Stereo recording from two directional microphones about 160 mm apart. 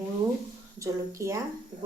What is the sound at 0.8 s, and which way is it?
Speech, 20° right (ahead or behind).